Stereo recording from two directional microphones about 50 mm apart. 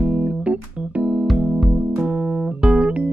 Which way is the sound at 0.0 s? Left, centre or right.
Right.